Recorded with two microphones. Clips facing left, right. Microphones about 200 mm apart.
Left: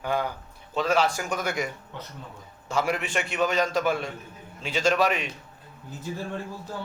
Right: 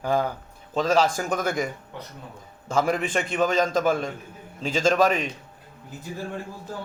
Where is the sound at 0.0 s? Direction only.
40° right (ahead or behind).